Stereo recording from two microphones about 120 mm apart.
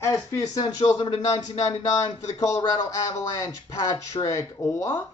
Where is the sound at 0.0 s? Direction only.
25° left (ahead or behind).